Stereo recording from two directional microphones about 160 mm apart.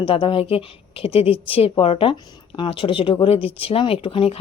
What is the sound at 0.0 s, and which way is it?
Speech, 35° left (ahead or behind).